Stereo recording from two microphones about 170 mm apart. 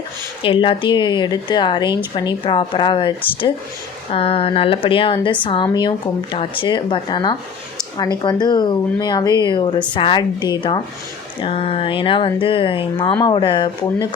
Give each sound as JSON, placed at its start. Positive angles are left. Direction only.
{"t": 0.4, "sound": "speech", "side_deg": 30}
{"t": 4.1, "sound": "speech", "side_deg": 35}